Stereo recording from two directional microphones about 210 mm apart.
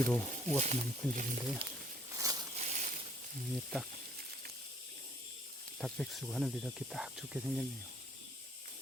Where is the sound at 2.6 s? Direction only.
35° right (ahead or behind).